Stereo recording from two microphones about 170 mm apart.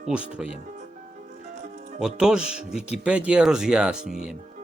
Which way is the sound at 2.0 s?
5° right (ahead or behind).